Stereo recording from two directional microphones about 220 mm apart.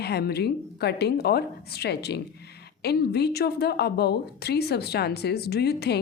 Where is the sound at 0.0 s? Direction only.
45° left (ahead or behind).